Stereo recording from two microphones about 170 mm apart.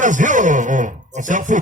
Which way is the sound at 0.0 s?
50° right (ahead or behind).